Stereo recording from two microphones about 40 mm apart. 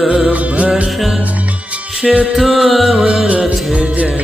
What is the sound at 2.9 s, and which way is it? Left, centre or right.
Music, right.